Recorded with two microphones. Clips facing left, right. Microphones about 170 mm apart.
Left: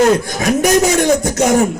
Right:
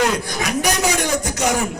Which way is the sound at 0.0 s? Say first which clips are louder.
Left 8 dB; 45° left (ahead or behind).